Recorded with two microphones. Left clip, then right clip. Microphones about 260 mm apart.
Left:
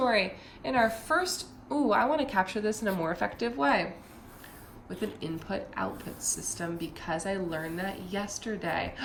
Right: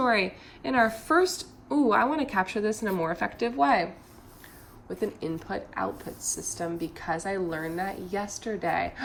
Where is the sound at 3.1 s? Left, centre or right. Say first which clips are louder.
Right 2 dB; centre.